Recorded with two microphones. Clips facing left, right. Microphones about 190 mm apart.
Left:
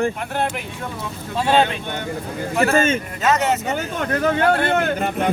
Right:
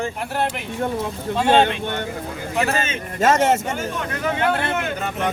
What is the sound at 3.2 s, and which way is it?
Speech, 50° right (ahead or behind).